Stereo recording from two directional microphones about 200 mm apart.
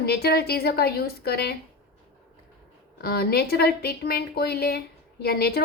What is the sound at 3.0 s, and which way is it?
A woman's voice, 50° left (ahead or behind).